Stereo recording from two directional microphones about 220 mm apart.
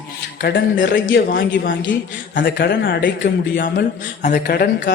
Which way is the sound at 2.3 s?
45° left (ahead or behind).